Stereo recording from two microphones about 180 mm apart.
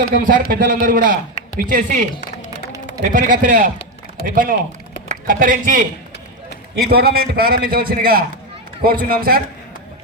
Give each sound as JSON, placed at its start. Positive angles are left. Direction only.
{"t": 0.1, "sound": "a man's voice", "side_deg": -55}